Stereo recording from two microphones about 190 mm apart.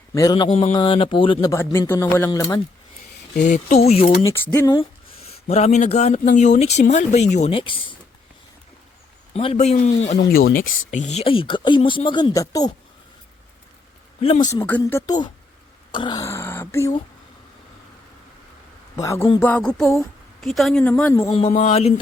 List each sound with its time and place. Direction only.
0.1 s speech: 20° left (ahead or behind)
3.3 s speech: 40° left (ahead or behind)
4.3 s speech: 10° left (ahead or behind)
5.5 s speech: 35° left (ahead or behind)
9.3 s speech: 30° left (ahead or behind)
14.2 s speech: 30° left (ahead or behind)
14.5 s speech: 10° left (ahead or behind)
18.9 s a woman's voice: 15° left (ahead or behind)
21.4 s speech: 35° left (ahead or behind)